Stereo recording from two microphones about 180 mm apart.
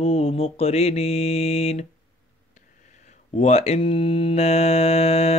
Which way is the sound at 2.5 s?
40° left (ahead or behind).